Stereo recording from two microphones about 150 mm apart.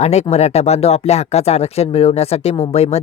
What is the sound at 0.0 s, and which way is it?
Speech, 45° left (ahead or behind).